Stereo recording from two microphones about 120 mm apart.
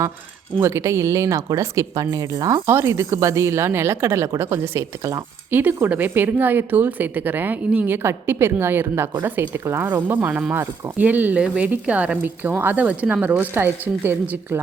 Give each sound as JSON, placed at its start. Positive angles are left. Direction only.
{"t": 0.6, "sound": "speech", "side_deg": -25}